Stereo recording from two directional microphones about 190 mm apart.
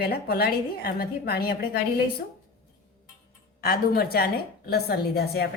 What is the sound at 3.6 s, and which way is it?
A woman's voice, 50° left (ahead or behind).